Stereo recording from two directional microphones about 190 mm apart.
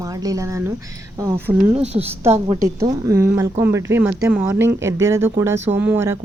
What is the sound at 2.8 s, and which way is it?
Speech, 15° right (ahead or behind).